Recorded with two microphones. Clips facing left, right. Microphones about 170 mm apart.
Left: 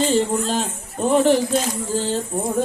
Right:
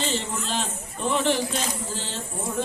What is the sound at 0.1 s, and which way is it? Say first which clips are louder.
Speech: left 10 dB; 45° left (ahead or behind).